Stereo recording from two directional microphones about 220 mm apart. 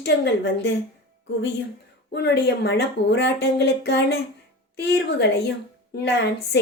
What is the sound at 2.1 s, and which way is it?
A woman's voice, 50° left (ahead or behind).